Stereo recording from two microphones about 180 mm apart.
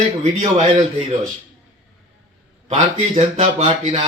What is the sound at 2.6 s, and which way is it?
Speech, 35° right (ahead or behind).